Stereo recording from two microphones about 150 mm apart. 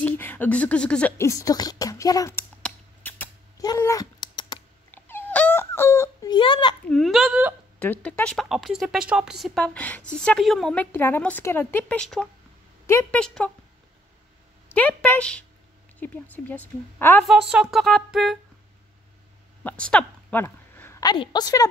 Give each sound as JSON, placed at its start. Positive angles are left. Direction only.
{"t": 0.0, "sound": "speech", "side_deg": 10}
{"t": 1.1, "sound": "speech", "side_deg": 20}
{"t": 2.6, "sound": "scissors", "side_deg": 15}
{"t": 3.6, "sound": "cat", "side_deg": 20}
{"t": 4.9, "sound": "wail", "side_deg": 15}
{"t": 6.3, "sound": "speech", "side_deg": 35}
{"t": 6.9, "sound": "speech", "side_deg": 0}
{"t": 7.8, "sound": "a woman's voice", "side_deg": 10}
{"t": 12.8, "sound": "a woman's voice", "side_deg": 15}
{"t": 13.2, "sound": "speech", "side_deg": 5}
{"t": 14.7, "sound": "a woman's voice", "side_deg": 10}
{"t": 17.2, "sound": "speech", "side_deg": 0}
{"t": 19.6, "sound": "a sound", "side_deg": 10}
{"t": 21.0, "sound": "speech", "side_deg": 30}